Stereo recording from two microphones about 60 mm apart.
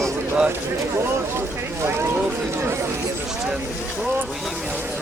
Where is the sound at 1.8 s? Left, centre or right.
Right.